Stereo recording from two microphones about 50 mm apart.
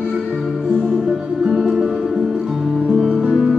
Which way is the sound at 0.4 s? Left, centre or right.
Centre.